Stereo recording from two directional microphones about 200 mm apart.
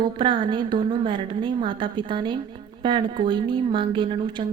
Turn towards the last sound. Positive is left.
turn(degrees=-25)  # may be behind; listen again after turning